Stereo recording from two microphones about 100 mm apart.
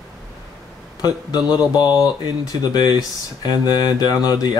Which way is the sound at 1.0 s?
40° left (ahead or behind).